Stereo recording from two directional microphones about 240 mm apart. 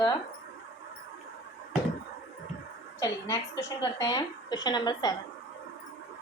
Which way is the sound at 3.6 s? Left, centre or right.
Centre.